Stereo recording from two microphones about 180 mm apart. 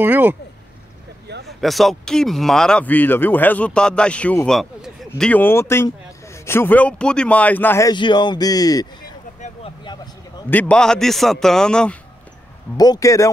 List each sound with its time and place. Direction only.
0.0 s speech: 10° right (ahead or behind)
1.2 s vehicle: 65° right (ahead or behind)
1.6 s speech: centre (ahead or behind)
7.9 s speech: 25° left (ahead or behind)
10.5 s a man's voice: 10° left (ahead or behind)
12.7 s speech: 20° left (ahead or behind)